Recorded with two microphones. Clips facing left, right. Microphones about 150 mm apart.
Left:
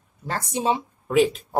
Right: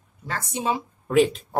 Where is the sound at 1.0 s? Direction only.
Centre (ahead or behind).